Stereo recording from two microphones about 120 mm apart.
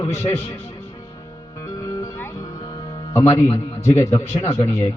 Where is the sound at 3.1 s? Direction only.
25° left (ahead or behind).